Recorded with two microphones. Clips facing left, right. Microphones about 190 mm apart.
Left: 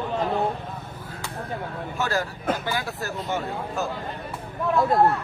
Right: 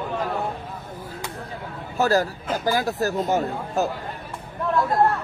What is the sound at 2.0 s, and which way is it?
Speech, 40° right (ahead or behind).